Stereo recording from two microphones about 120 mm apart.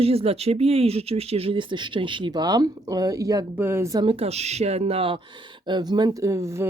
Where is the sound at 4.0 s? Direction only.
50° right (ahead or behind).